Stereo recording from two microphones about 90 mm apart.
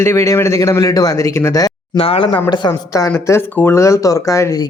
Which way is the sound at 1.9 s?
90° left.